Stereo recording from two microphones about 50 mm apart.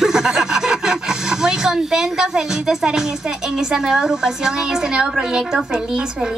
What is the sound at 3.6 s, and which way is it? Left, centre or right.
A woman's voice, centre.